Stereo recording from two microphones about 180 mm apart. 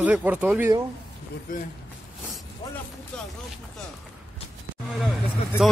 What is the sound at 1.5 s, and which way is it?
Speech, 50° left (ahead or behind).